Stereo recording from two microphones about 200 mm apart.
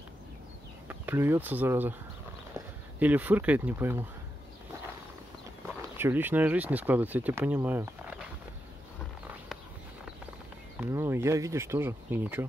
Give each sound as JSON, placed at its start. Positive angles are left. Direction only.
{"t": 0.8, "sound": "speech", "side_deg": -10}
{"t": 5.9, "sound": "speech", "side_deg": -10}
{"t": 10.8, "sound": "speech", "side_deg": -10}